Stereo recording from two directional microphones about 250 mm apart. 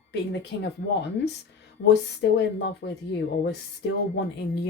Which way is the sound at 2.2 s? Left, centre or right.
Left.